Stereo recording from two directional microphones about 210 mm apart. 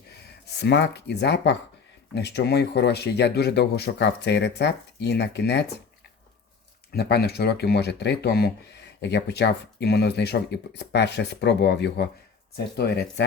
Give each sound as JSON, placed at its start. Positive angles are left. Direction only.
{"t": 0.6, "sound": "speech", "side_deg": 55}
{"t": 6.9, "sound": "speech", "side_deg": 50}